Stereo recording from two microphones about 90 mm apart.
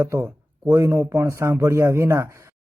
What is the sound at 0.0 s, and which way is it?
Speech, 30° right (ahead or behind).